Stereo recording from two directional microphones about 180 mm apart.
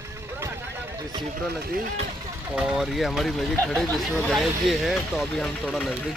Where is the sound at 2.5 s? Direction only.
5° right (ahead or behind).